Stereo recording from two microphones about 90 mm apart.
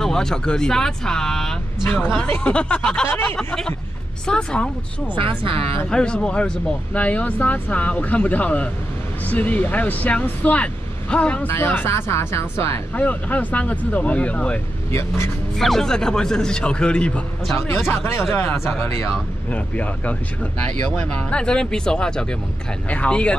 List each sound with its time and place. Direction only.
0.0 s speech: 5° left (ahead or behind)
5.1 s speech: 80° right
5.9 s speech: 10° left (ahead or behind)
11.4 s speech: 25° left (ahead or behind)
12.9 s speech: 15° left (ahead or behind)
14.9 s speech: 30° left (ahead or behind)
15.6 s speech: 5° left (ahead or behind)
17.6 s speech: 30° left (ahead or behind)
19.5 s speech: 15° left (ahead or behind)